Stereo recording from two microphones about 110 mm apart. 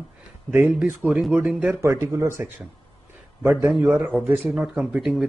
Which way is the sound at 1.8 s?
25° right (ahead or behind).